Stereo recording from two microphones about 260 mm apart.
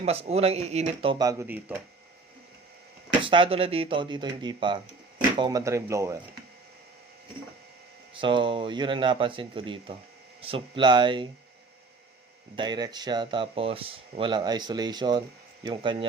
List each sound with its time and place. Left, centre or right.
0.0 s speech: right
1.2 s speech: centre
3.2 s speech: centre
8.1 s speech: centre
12.5 s speech: centre